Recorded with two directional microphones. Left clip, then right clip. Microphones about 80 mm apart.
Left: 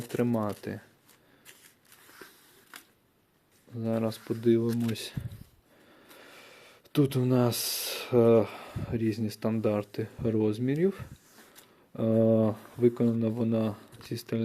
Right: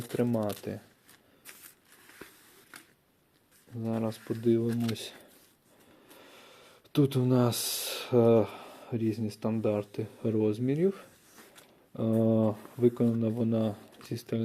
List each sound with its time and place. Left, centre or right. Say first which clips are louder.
0.2 s speech: even; left
4.0 s speech: left 1 dB; left
6.1 s speech: left 2 dB; left